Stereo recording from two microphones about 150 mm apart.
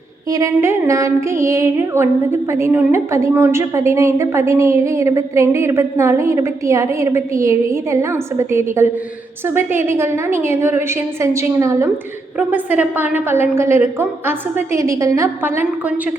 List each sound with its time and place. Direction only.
0.3 s music: 20° right (ahead or behind)
9.6 s a woman's voice: 15° right (ahead or behind)